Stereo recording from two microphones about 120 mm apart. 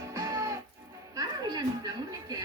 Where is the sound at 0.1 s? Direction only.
30° right (ahead or behind).